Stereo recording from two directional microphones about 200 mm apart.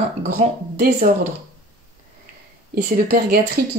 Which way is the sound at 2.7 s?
50° right (ahead or behind).